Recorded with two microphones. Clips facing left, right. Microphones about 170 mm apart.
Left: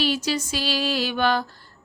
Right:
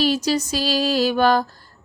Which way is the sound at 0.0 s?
40° right (ahead or behind).